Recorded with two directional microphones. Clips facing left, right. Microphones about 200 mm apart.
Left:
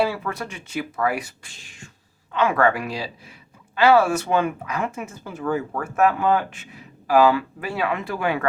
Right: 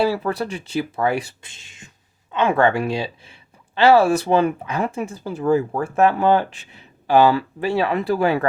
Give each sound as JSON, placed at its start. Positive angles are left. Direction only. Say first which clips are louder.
{"t": 0.0, "sound": "speech", "louder": "right 4 dB", "side_deg": -35}